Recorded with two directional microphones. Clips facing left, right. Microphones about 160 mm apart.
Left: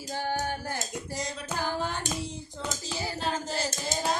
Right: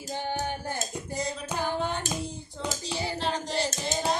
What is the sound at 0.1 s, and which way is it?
Music, 20° right (ahead or behind).